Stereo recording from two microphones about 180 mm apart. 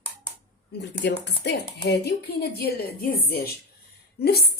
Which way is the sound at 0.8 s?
70° left (ahead or behind).